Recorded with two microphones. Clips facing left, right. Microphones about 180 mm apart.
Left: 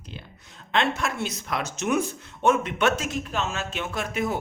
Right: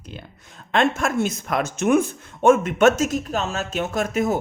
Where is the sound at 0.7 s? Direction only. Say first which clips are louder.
Right 5 dB; 45° right (ahead or behind).